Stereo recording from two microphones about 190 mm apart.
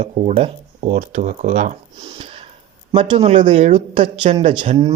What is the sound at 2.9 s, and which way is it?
Speech, 30° right (ahead or behind).